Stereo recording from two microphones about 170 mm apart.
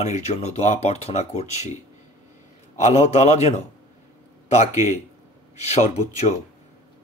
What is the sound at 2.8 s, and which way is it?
Speech, 40° left (ahead or behind).